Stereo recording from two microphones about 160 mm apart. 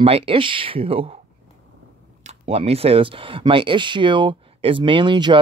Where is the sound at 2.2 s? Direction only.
40° right (ahead or behind).